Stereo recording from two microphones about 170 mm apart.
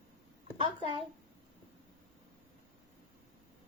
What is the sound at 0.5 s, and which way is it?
Speech, 30° right (ahead or behind).